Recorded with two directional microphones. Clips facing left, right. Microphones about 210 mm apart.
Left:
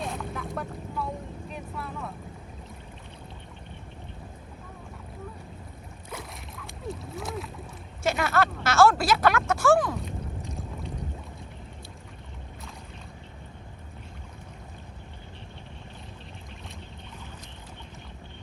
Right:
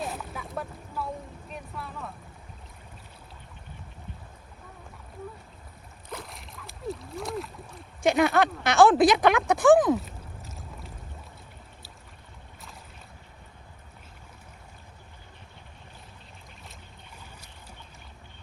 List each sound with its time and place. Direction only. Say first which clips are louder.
0.0 s boat: left 2 dB; 5° right (ahead or behind)
6.1 s boat: even; centre (ahead or behind)
8.2 s speech: right 2 dB; 15° right (ahead or behind)
10.0 s a sound: left 8 dB; 5° right (ahead or behind)